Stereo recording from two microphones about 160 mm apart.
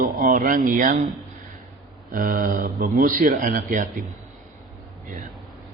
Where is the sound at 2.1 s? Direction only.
55° right (ahead or behind).